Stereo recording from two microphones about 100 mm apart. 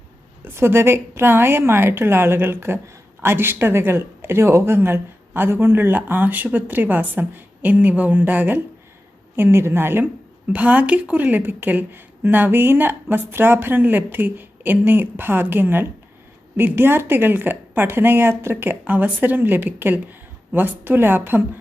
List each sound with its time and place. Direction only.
0.4 s speech: 25° right (ahead or behind)